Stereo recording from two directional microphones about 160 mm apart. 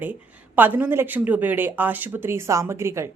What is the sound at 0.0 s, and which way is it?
Speech, 10° right (ahead or behind).